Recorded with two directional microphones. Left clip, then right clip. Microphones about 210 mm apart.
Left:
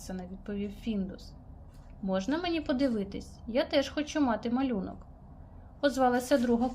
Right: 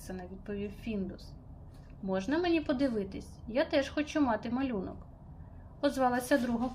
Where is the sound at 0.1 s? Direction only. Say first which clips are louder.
Even; 15° left (ahead or behind).